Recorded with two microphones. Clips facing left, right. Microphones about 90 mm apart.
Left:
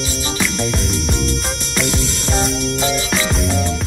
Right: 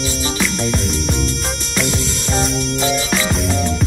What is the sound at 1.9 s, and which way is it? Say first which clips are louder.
Music: even; 20° left (ahead or behind).